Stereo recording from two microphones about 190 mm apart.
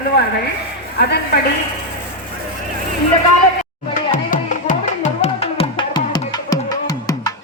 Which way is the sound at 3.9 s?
45° left (ahead or behind).